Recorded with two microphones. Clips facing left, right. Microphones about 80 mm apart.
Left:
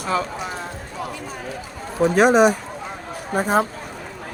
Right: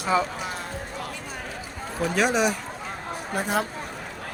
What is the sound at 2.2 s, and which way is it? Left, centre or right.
Speech, left.